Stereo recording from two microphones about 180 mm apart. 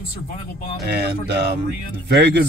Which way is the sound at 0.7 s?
65° right (ahead or behind).